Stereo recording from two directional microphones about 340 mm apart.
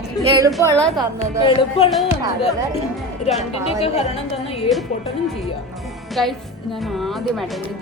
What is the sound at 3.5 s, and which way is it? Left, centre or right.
A woman's voice, centre.